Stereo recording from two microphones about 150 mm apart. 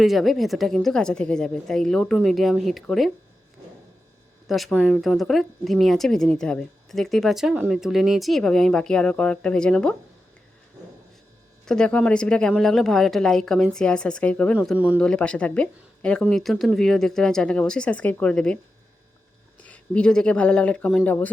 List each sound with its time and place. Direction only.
0.0 s a woman's voice: centre (ahead or behind)
4.4 s a woman's voice: centre (ahead or behind)
11.6 s a woman's voice: 5° left (ahead or behind)
19.6 s speech: 10° left (ahead or behind)